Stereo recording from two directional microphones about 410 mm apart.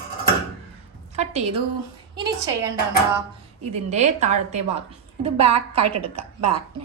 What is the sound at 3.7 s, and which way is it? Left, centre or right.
Speech, centre.